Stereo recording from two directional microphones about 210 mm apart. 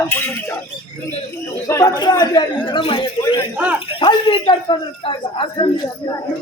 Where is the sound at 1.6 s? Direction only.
15° left (ahead or behind).